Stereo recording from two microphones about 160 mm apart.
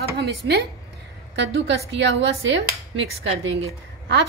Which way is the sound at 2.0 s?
90° right.